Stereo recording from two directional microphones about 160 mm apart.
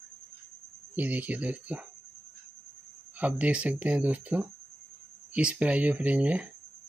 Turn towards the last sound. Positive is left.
turn(degrees=-10)  # may be behind; listen again after turning